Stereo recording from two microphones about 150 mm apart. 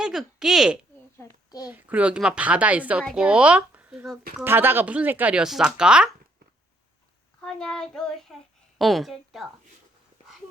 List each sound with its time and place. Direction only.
0.0 s speech: centre (ahead or behind)
1.2 s a sound: 25° left (ahead or behind)
1.6 s speech: 10° right (ahead or behind)
3.0 s child singing: 5° left (ahead or behind)
3.2 s speech: 10° right (ahead or behind)
7.4 s child singing: 5° left (ahead or behind)